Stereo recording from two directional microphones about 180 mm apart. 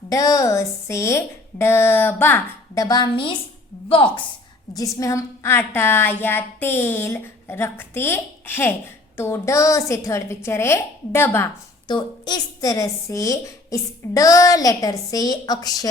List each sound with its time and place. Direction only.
0.1 s a woman's voice: 20° left (ahead or behind)
2.8 s speech: 20° left (ahead or behind)
4.7 s a woman's voice: 20° left (ahead or behind)
11.9 s speech: 25° left (ahead or behind)